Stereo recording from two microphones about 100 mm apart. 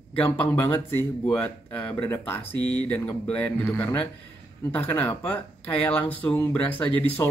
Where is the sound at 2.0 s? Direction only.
25° left (ahead or behind).